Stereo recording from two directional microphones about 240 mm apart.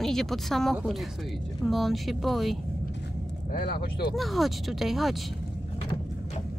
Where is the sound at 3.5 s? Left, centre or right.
Left.